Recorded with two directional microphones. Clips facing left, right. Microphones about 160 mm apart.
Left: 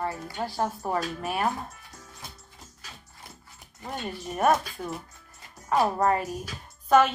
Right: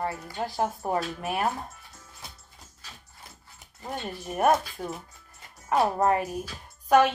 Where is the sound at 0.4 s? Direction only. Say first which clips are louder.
Right 1 dB; 20° right (ahead or behind).